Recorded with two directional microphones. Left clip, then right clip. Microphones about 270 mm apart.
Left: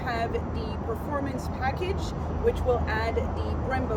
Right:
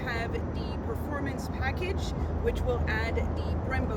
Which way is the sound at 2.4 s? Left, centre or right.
Centre.